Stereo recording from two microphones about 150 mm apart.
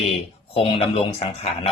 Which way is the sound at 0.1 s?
40° left (ahead or behind).